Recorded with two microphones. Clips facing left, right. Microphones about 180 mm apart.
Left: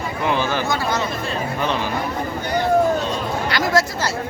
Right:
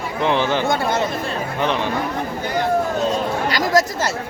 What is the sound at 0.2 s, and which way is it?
Speech, 20° right (ahead or behind).